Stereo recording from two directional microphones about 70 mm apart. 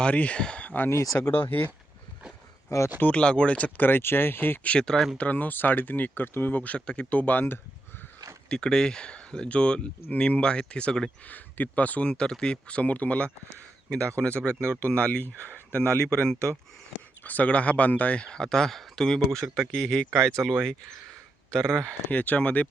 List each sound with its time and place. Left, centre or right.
0.0 s speech: centre
2.6 s speech: left
3.0 s speech: centre
4.7 s speech: centre
5.1 s speech: left
8.4 s speech: centre
11.3 s speech: left
14.7 s speech: left
16.0 s speech: centre
22.1 s speech: left